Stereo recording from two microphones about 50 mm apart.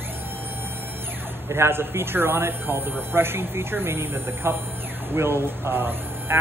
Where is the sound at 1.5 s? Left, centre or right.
Right.